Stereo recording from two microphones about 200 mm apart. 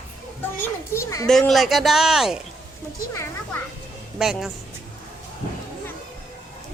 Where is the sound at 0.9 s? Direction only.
15° left (ahead or behind).